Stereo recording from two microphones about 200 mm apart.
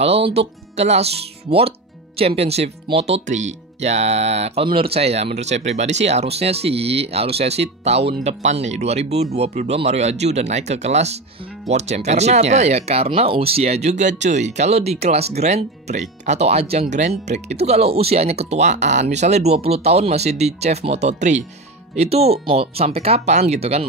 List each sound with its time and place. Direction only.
0.0 s speech: 30° right (ahead or behind)